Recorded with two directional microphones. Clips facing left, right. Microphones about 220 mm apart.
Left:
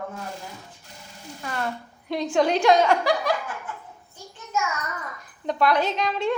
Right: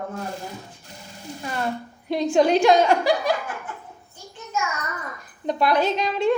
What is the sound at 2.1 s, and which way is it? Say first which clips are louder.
A woman's voice: right 4 dB; 10° right (ahead or behind).